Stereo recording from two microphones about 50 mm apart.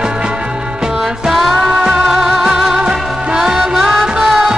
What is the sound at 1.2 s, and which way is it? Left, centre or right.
Music, centre.